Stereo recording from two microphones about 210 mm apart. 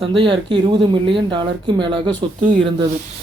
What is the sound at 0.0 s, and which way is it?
Speech, 25° right (ahead or behind).